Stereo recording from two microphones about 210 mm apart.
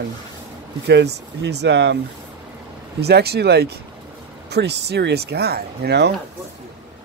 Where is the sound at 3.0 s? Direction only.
50° right (ahead or behind).